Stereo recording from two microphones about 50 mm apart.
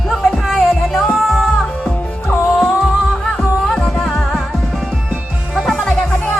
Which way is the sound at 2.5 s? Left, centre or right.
Centre.